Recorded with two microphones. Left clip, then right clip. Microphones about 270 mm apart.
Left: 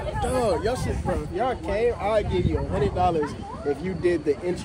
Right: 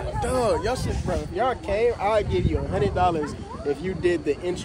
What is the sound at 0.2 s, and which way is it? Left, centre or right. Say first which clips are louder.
Speech: right 1 dB; right.